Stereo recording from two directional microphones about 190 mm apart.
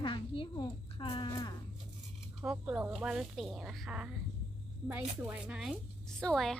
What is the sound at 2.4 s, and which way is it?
Speech, 5° right (ahead or behind).